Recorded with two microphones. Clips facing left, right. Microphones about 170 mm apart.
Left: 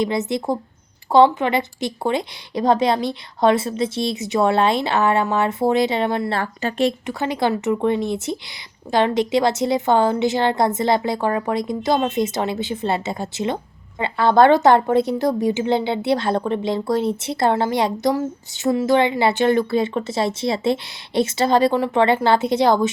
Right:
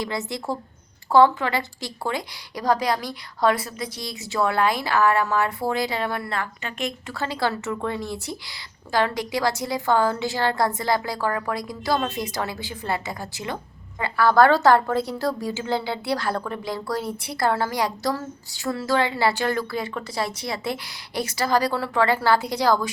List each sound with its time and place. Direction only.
0.0 s a woman's voice: 20° left (ahead or behind)
7.1 s a woman's voice: 20° left (ahead or behind)